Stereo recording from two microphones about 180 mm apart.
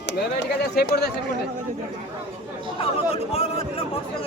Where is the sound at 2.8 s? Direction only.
35° left (ahead or behind).